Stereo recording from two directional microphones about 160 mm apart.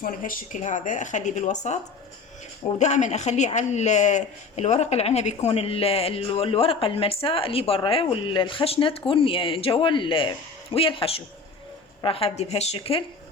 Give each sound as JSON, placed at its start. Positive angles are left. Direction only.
{"t": 0.0, "sound": "speech", "side_deg": 60}